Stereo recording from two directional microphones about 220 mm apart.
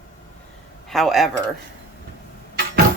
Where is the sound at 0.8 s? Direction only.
Centre (ahead or behind).